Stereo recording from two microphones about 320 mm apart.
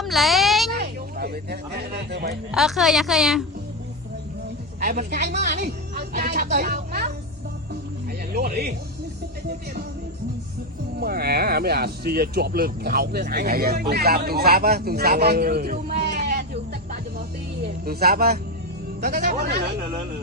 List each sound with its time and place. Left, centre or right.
0.0 s a sound: centre
0.8 s speech: right
2.5 s a woman's voice: centre
4.8 s speech: right
8.3 s speech: right
11.0 s speech: right
17.8 s speech: right